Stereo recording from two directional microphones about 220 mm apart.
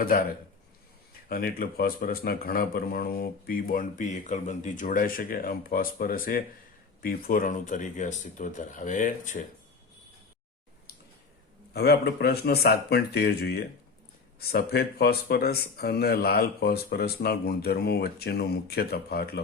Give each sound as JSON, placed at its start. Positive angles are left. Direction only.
{"t": 0.0, "sound": "a man's voice", "side_deg": 40}
{"t": 1.3, "sound": "a man's voice", "side_deg": 45}
{"t": 11.7, "sound": "speech", "side_deg": 45}